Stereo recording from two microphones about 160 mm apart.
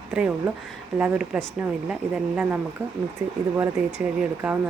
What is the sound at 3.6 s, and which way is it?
A woman's voice, 10° right (ahead or behind).